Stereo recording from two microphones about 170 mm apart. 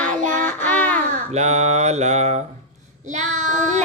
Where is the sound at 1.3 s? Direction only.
40° right (ahead or behind).